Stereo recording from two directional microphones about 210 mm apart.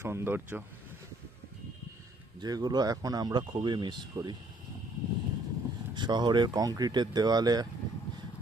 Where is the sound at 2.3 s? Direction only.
20° right (ahead or behind).